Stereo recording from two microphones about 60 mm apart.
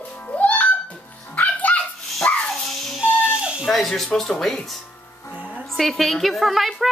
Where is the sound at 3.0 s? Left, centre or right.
Centre.